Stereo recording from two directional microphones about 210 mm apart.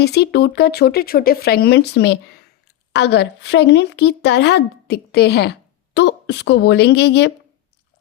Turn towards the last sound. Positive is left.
turn(degrees=50)  # may be behind; listen again after turning